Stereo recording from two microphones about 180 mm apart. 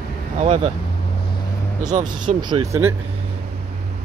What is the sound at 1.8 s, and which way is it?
Speech, 45° right (ahead or behind).